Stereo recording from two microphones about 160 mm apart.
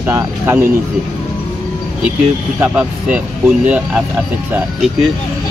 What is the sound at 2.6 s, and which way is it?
Speech, 10° right (ahead or behind).